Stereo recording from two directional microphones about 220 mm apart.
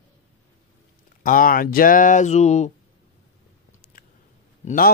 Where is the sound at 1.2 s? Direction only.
40° left (ahead or behind).